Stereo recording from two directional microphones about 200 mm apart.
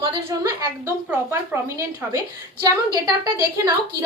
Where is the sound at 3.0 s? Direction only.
15° right (ahead or behind).